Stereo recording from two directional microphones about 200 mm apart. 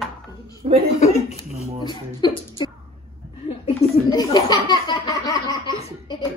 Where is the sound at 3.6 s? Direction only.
20° left (ahead or behind).